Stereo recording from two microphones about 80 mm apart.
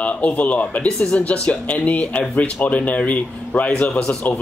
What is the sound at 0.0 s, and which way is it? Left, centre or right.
A man's voice, centre.